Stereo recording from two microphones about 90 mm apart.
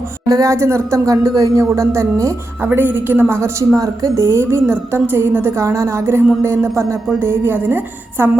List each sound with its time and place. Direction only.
0.3 s speech: 40° right (ahead or behind)
2.6 s a woman's voice: 20° right (ahead or behind)